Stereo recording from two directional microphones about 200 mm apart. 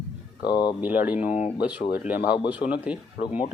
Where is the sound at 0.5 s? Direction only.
20° left (ahead or behind).